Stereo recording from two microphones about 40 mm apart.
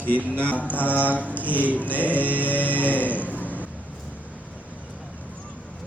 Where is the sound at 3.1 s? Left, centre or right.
Left.